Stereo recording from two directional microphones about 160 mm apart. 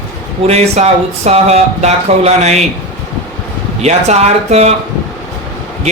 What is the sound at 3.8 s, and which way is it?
Speech, 45° right (ahead or behind).